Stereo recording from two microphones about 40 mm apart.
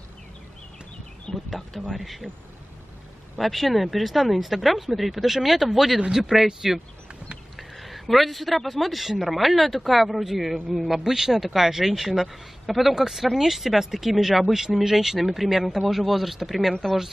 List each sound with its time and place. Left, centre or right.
1.3 s speech: left
1.7 s speech: centre
2.0 s speech: centre
3.3 s speech: centre